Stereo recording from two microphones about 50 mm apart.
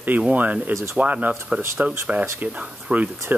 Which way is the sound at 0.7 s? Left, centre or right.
Right.